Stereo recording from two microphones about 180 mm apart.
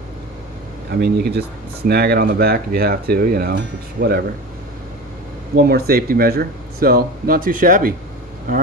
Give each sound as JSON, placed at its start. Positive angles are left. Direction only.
{"t": 0.9, "sound": "speech", "side_deg": -60}
{"t": 5.6, "sound": "speech", "side_deg": -60}